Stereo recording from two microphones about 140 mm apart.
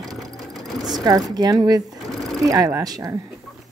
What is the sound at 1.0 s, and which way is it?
Speech, 30° right (ahead or behind).